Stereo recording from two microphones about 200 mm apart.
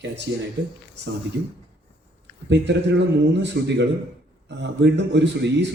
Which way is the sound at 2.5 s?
60° right (ahead or behind).